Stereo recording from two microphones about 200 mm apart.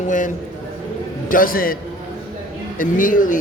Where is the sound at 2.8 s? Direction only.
45° left (ahead or behind).